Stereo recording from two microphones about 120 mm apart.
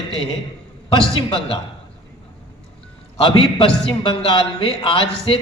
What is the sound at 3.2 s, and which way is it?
A man's voice, 45° left (ahead or behind).